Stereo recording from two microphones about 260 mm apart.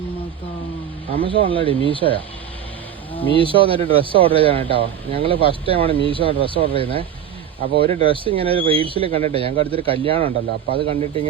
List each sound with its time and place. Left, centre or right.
1.1 s speech: centre
3.3 s speech: centre